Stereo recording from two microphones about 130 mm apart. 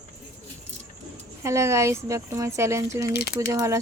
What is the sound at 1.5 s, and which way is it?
Speech, 20° right (ahead or behind).